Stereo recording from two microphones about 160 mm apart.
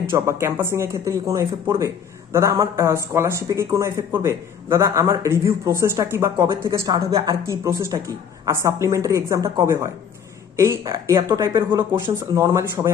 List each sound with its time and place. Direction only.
0.1 s speech: 15° right (ahead or behind)
12.5 s speech: 20° right (ahead or behind)